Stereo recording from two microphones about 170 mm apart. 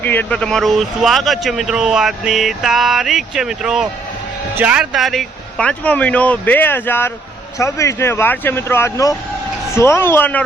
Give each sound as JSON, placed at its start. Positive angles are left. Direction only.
{"t": 0.0, "sound": "speech", "side_deg": 10}